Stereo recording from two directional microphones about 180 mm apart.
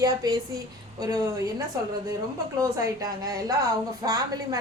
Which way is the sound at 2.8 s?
20° right (ahead or behind).